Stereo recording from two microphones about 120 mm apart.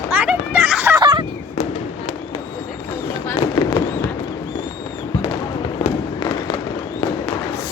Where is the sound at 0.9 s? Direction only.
40° right (ahead or behind).